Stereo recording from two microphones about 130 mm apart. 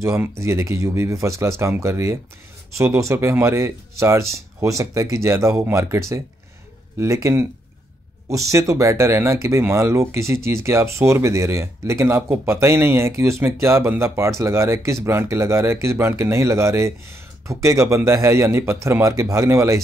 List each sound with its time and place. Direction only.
0.0 s speech: 20° right (ahead or behind)